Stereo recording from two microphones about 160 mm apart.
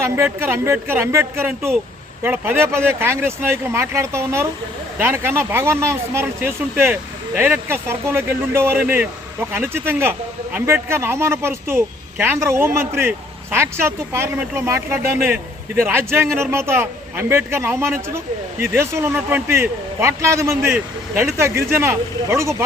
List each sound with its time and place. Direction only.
0.2 s speech: 15° right (ahead or behind)